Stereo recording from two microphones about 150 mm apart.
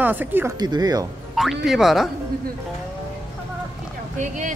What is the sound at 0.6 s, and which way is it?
Speech, 25° right (ahead or behind).